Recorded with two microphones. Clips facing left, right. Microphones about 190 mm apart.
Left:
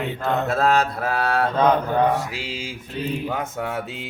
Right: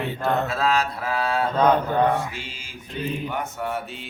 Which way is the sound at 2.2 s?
90° left.